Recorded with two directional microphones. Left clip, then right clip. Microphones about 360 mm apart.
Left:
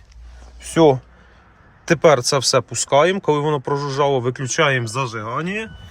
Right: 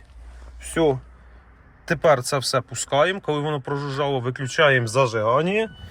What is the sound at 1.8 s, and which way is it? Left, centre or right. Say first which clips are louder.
Speech: left 5 dB; centre.